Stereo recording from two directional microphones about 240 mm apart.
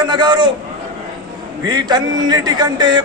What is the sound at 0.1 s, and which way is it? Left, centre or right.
Speech, centre.